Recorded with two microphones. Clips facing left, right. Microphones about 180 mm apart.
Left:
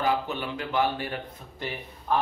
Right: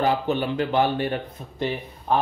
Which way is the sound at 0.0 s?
30° right (ahead or behind).